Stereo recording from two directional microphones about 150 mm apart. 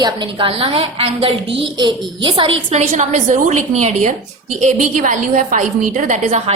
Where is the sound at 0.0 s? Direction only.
30° right (ahead or behind).